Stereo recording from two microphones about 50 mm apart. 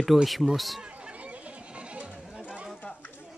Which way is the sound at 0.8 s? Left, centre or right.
Right.